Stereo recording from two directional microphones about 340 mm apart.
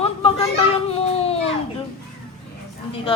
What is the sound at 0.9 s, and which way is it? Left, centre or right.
Baby cry, centre.